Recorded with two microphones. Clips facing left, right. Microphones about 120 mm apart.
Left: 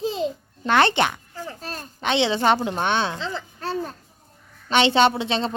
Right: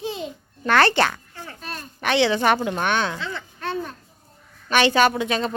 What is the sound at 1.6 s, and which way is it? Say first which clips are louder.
Speech: even; 35° left (ahead or behind).